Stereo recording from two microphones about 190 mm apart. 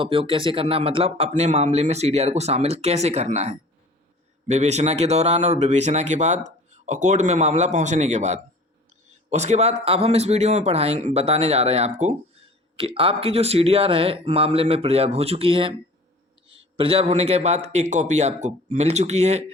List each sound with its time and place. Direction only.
0.0 s speech: 25° right (ahead or behind)
16.7 s speech: 30° right (ahead or behind)